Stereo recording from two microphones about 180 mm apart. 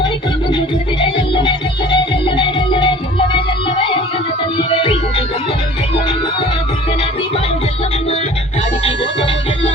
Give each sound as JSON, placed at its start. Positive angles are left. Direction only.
{"t": 0.5, "sound": "music", "side_deg": 25}
{"t": 4.7, "sound": "music", "side_deg": 30}
{"t": 8.8, "sound": "music", "side_deg": 35}